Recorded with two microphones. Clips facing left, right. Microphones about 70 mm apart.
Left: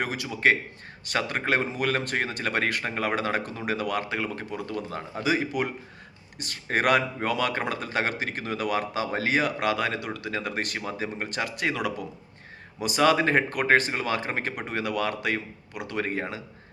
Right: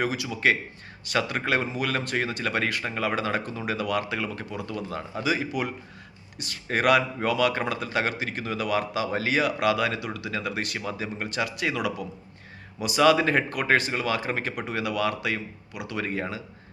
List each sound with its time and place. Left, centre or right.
0.0 s speech: left
5.2 s speech: left